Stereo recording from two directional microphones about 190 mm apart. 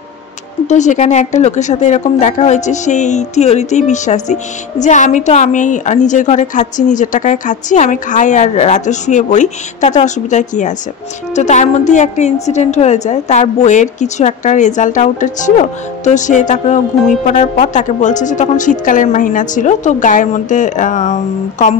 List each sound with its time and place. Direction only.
0.7 s a woman's voice: 40° left (ahead or behind)